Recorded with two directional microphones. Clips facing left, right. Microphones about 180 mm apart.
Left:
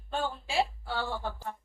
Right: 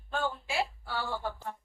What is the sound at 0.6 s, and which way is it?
Speech, 25° left (ahead or behind).